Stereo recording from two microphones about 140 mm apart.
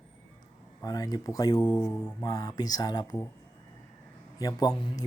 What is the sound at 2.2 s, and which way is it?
Speech, 30° left (ahead or behind).